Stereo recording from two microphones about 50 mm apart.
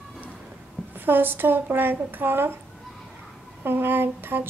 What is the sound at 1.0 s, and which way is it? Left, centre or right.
A woman's voice, right.